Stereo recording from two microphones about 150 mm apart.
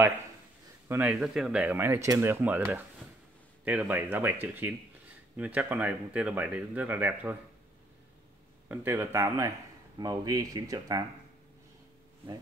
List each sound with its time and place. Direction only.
0.8 s speech: 10° right (ahead or behind)
8.6 s speech: 15° right (ahead or behind)